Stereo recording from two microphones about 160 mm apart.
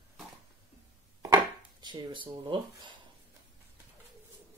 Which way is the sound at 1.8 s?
30° right (ahead or behind).